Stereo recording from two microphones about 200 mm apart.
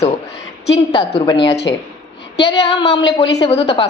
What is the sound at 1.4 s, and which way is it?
Speech, 60° left (ahead or behind).